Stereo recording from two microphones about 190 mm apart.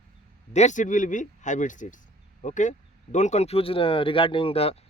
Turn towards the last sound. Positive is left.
turn(degrees=30)  # may be behind; listen again after turning